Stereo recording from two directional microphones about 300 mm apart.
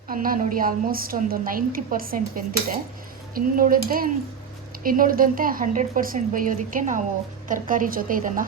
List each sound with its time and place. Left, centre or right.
0.1 s a woman's voice: right